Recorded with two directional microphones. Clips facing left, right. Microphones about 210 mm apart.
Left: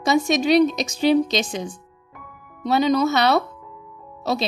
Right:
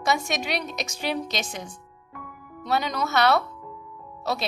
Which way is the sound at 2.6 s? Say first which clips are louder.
Left 8 dB; 25° left (ahead or behind).